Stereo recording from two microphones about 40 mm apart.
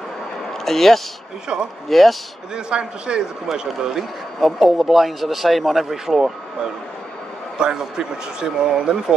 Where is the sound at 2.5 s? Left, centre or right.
Right.